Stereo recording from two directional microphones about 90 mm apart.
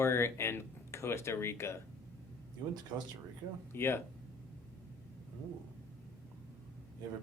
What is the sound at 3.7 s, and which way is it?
Speech, 25° left (ahead or behind).